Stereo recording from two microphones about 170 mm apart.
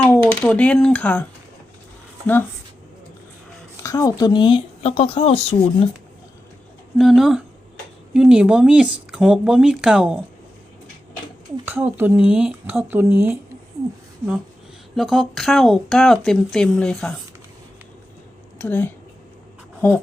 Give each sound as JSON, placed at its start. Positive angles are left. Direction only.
{"t": 0.0, "sound": "speech", "side_deg": 10}
{"t": 3.8, "sound": "speech", "side_deg": 20}
{"t": 7.0, "sound": "speech", "side_deg": 0}
{"t": 11.6, "sound": "speech", "side_deg": -10}
{"t": 14.9, "sound": "speech", "side_deg": 0}
{"t": 18.6, "sound": "speech", "side_deg": 10}